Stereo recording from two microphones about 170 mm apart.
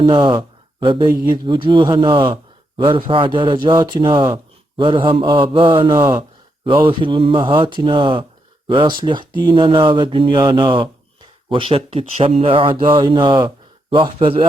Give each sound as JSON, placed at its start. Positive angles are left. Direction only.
{"t": 0.0, "sound": "speech", "side_deg": -30}